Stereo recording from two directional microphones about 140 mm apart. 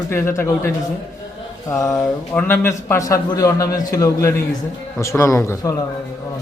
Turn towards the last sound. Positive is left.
turn(degrees=20)  # may be behind; listen again after turning